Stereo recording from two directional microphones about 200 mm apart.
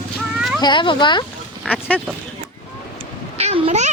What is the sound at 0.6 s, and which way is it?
Speech, 25° left (ahead or behind).